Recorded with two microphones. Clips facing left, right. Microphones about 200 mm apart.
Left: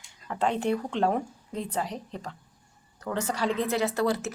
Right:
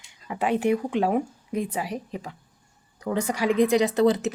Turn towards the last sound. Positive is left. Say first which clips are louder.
# right 6 dB
turn(degrees=-20)  # may be behind; listen again after turning